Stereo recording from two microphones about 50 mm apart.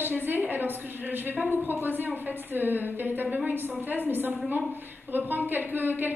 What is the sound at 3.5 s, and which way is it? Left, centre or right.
A woman's voice, right.